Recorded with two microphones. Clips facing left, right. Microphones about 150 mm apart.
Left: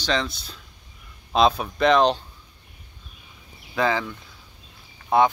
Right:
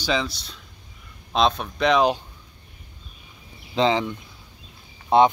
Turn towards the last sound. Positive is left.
turn(degrees=-25)  # may be behind; listen again after turning